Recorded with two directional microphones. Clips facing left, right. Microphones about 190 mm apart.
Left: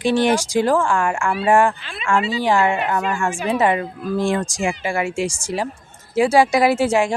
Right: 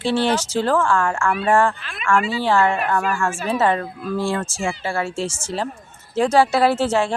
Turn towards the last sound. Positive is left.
turn(degrees=10)  # may be behind; listen again after turning